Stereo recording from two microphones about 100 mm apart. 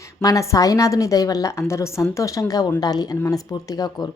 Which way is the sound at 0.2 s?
35° left (ahead or behind).